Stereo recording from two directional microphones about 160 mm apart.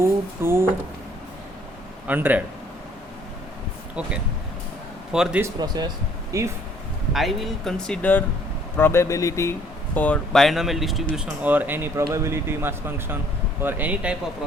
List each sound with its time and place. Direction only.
0.0 s speech: 15° right (ahead or behind)
2.0 s speech: 10° right (ahead or behind)
5.1 s speech: 5° right (ahead or behind)
5.4 s speech: 25° right (ahead or behind)
7.1 s speech: centre (ahead or behind)